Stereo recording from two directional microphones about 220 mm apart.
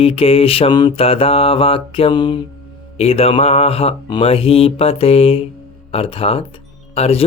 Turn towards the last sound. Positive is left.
turn(degrees=30)  # may be behind; listen again after turning